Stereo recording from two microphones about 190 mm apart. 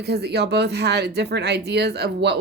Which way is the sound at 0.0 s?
60° right (ahead or behind).